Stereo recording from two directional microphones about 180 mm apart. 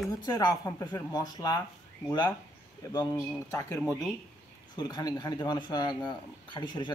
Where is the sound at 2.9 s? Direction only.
20° left (ahead or behind).